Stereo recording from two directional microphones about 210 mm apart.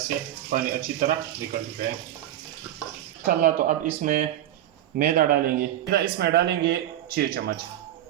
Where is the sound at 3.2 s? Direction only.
40° right (ahead or behind).